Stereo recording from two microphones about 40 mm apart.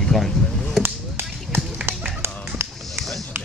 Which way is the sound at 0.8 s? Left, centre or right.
Right.